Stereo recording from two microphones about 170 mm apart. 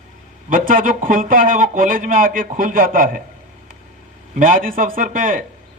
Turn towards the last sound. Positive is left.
turn(degrees=-55)  # may be behind; listen again after turning